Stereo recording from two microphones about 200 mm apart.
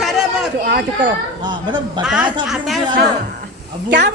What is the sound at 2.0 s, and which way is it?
Speech, 5° right (ahead or behind).